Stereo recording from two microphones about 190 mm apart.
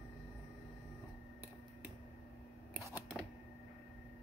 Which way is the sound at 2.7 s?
10° right (ahead or behind).